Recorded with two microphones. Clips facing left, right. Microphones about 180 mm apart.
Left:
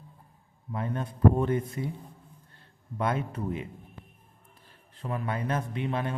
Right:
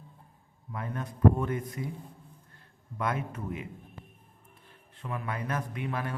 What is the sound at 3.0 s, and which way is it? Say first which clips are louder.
Speech: left 3 dB; 30° left (ahead or behind).